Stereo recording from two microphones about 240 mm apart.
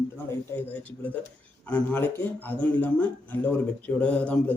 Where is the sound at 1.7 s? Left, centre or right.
Centre.